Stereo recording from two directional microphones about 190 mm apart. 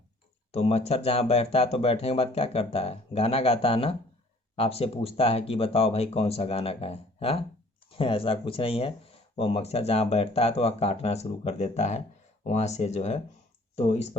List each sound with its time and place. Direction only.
0.5 s speech: 35° left (ahead or behind)